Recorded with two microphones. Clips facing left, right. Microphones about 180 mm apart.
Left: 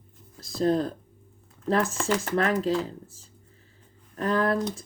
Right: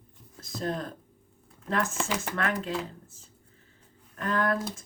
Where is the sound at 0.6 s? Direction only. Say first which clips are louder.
Left 9 dB; 35° left (ahead or behind).